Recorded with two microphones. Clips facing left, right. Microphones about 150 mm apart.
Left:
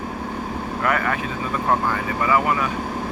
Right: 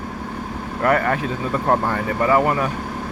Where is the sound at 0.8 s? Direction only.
40° right (ahead or behind).